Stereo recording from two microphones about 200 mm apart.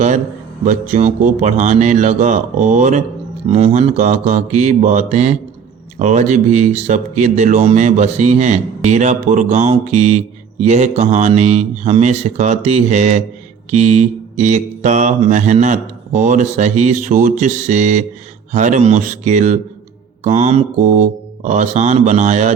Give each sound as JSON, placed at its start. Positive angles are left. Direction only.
{"t": 0.6, "sound": "speech", "side_deg": -40}